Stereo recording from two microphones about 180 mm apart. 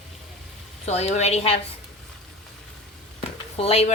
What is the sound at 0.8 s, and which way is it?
Speech, 35° left (ahead or behind).